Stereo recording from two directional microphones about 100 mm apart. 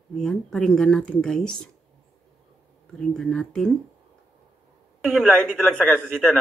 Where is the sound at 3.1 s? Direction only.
5° left (ahead or behind).